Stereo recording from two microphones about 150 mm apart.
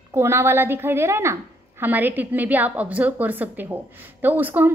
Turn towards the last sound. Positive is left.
turn(degrees=-10)  # may be behind; listen again after turning